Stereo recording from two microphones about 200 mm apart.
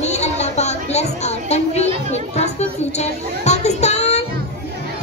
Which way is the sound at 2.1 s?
35° left (ahead or behind).